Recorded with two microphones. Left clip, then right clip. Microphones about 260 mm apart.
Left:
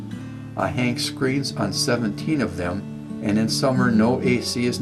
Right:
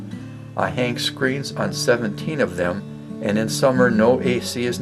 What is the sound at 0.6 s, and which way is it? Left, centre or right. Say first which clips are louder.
Speech: right 2 dB; centre.